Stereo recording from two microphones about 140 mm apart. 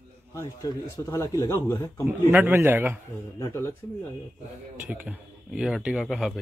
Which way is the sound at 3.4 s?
20° left (ahead or behind).